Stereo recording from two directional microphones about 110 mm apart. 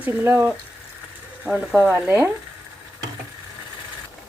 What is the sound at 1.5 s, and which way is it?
Speech, 10° right (ahead or behind).